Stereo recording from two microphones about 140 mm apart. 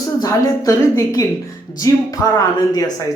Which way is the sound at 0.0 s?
25° left (ahead or behind).